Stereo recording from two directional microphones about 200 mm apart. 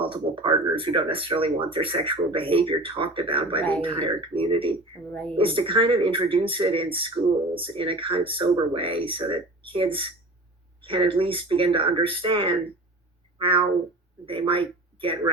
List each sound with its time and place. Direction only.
0.0 s speech: 25° right (ahead or behind)